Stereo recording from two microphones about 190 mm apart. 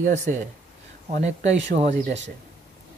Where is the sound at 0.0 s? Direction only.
40° right (ahead or behind).